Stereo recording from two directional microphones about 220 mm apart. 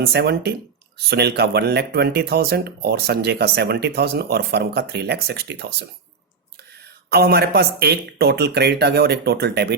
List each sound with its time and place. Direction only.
0.0 s speech: 45° right (ahead or behind)
7.1 s speech: 45° right (ahead or behind)